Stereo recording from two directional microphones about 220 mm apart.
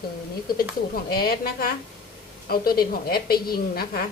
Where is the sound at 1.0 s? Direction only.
45° left (ahead or behind).